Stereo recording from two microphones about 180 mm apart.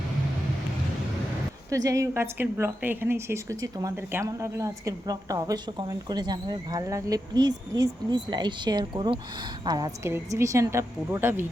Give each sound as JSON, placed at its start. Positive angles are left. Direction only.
{"t": 1.7, "sound": "a woman's voice", "side_deg": -20}